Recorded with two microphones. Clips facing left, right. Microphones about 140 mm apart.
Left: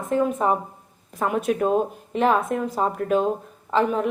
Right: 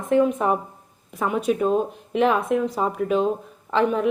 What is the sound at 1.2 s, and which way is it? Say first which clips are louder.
A woman's voice: even; centre (ahead or behind).